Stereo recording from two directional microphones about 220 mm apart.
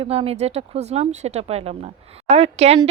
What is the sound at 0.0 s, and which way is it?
Speech, 25° right (ahead or behind).